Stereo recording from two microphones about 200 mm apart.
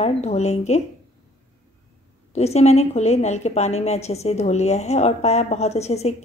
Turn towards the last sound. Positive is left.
turn(degrees=30)  # may be behind; listen again after turning